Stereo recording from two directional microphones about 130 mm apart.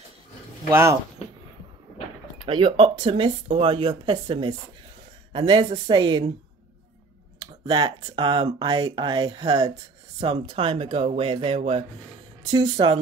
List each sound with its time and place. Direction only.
0.7 s speech: 20° right (ahead or behind)
2.3 s speech: 40° right (ahead or behind)
3.4 s speech: 45° right (ahead or behind)
7.3 s speech: 30° right (ahead or behind)
10.2 s speech: 45° right (ahead or behind)